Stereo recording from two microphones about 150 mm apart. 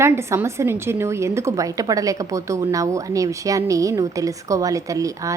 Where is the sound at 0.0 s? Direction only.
15° right (ahead or behind).